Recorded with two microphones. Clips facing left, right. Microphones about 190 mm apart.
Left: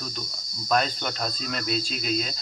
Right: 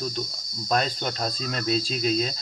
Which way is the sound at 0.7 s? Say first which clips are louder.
Even; 30° right (ahead or behind).